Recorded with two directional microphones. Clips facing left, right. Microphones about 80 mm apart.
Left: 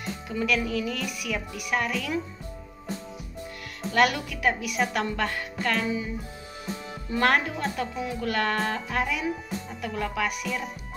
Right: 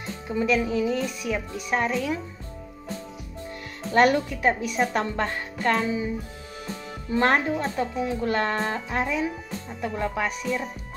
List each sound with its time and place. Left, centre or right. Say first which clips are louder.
0.3 s speech: right 4 dB; centre
3.9 s a woman's voice: right 4 dB; right
7.1 s speech: right 2 dB; right